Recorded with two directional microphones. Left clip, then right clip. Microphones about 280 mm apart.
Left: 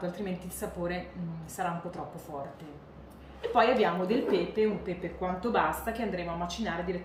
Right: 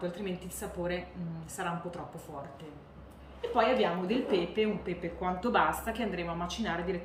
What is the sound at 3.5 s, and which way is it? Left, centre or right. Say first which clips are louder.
A woman's voice: left 3 dB; centre.